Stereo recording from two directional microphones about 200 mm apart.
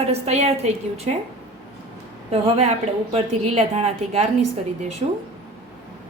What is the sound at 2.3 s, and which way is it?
A woman's voice, 35° right (ahead or behind).